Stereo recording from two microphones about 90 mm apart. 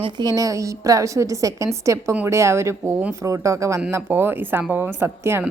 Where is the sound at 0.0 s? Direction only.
50° right (ahead or behind); by 4.0 s 35° right (ahead or behind).